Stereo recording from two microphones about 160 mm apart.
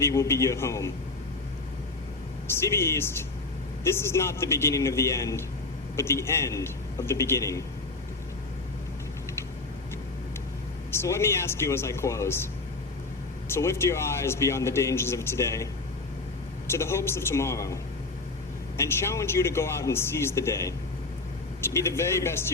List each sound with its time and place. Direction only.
0.0 s speech: 15° left (ahead or behind)
2.5 s speech: 15° left (ahead or behind)
10.9 s speech: 15° left (ahead or behind)
13.5 s speech: 15° left (ahead or behind)
18.8 s speech: 15° left (ahead or behind)